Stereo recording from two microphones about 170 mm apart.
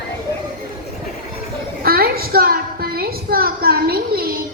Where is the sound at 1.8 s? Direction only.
60° right (ahead or behind).